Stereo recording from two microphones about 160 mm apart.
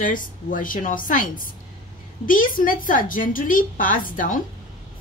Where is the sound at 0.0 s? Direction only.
55° left (ahead or behind).